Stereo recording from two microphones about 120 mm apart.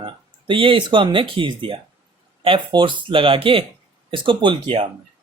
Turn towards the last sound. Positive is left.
turn(degrees=-45)  # may be behind; listen again after turning